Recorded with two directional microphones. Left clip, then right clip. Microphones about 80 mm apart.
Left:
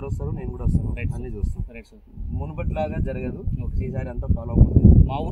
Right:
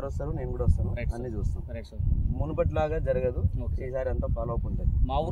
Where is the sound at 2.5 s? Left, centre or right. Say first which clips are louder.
Right 1 dB; right.